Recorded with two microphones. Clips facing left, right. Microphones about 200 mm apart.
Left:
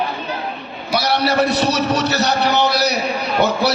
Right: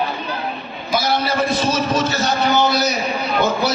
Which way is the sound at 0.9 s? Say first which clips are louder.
Left 2 dB; 70° left (ahead or behind).